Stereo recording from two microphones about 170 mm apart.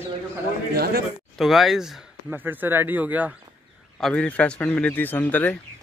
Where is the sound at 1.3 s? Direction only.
Centre (ahead or behind).